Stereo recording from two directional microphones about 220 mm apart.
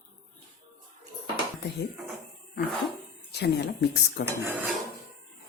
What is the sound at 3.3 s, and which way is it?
Speech, 50° left (ahead or behind).